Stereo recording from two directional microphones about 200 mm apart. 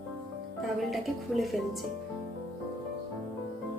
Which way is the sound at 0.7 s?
Centre (ahead or behind).